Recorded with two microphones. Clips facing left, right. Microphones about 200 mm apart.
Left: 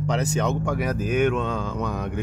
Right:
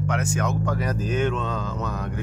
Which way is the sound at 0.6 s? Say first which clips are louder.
Left 1 dB; 10° left (ahead or behind).